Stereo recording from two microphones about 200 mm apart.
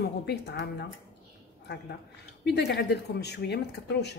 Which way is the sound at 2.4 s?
60° left (ahead or behind).